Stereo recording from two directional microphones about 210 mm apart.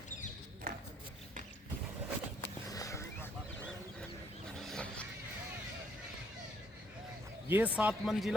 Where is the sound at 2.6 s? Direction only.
15° left (ahead or behind).